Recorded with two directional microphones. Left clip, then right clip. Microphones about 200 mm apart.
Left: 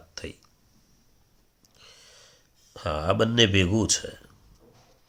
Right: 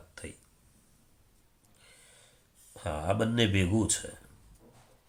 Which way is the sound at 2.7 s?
45° left (ahead or behind).